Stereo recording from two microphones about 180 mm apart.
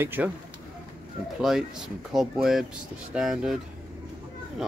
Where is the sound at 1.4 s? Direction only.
5° right (ahead or behind).